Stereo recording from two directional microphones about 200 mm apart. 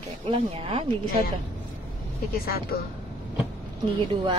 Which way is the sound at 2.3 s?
50° left (ahead or behind).